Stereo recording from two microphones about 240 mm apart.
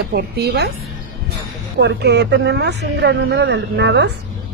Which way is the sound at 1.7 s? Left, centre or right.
Right.